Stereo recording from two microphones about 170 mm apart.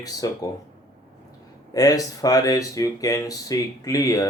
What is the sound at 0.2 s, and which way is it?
Speech, 20° left (ahead or behind).